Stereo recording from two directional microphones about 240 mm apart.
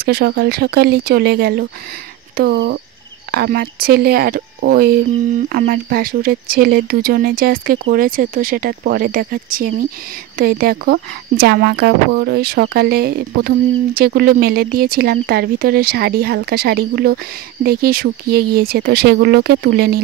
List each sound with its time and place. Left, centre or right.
0.0 s speech: right